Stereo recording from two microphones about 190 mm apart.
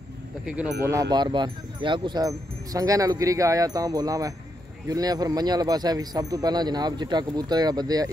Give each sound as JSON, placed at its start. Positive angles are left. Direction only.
{"t": 0.5, "sound": "speech", "side_deg": -5}
{"t": 1.1, "sound": "speech", "side_deg": -25}